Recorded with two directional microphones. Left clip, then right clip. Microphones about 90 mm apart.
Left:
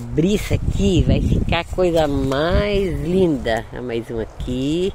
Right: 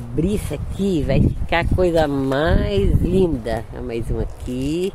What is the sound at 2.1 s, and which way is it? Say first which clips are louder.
Speech: even; 35° right (ahead or behind).